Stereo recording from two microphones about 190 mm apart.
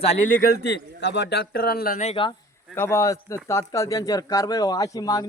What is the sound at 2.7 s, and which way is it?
Speech, 15° left (ahead or behind).